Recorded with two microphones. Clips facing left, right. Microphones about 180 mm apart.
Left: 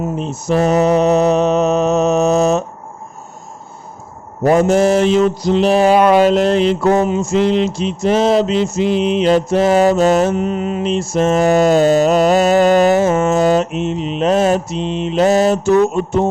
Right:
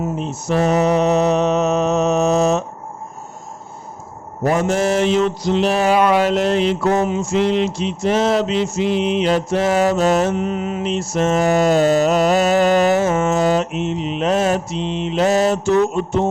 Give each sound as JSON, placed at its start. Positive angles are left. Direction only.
{"t": 0.2, "sound": "mantra", "side_deg": 35}
{"t": 4.5, "sound": "mantra", "side_deg": 35}